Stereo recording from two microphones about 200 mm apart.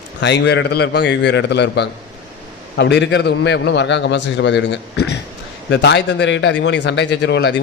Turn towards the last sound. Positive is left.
turn(degrees=60)  # may be behind; listen again after turning